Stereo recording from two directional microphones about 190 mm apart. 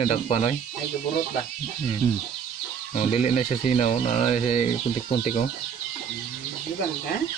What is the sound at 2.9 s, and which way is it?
Speech, 35° left (ahead or behind).